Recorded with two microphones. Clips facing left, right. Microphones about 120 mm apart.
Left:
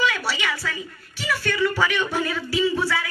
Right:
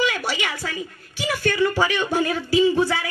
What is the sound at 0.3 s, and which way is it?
A woman's voice, 45° right (ahead or behind).